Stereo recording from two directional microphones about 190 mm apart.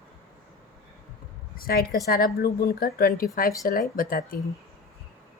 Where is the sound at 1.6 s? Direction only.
50° left (ahead or behind).